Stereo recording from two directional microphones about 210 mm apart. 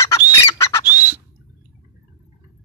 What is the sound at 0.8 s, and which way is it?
Bird, 10° right (ahead or behind).